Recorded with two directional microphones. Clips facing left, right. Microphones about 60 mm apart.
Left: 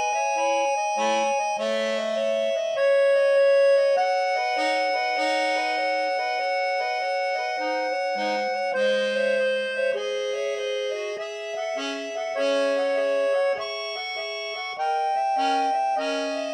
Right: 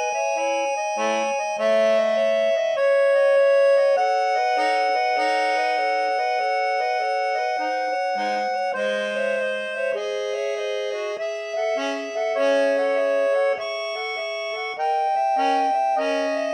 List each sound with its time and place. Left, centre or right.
0.4 s music: centre
1.0 s accordion: right
12.4 s music: right
14.8 s music: right